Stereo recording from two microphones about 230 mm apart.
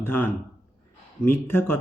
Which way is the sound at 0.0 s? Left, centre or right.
Centre.